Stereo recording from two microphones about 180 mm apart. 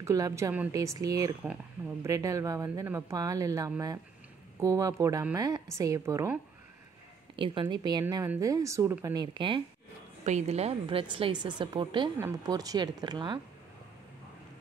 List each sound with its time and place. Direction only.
0.0 s a woman's voice: 15° right (ahead or behind)
7.3 s a woman's voice: 30° right (ahead or behind)
10.2 s speech: 40° right (ahead or behind)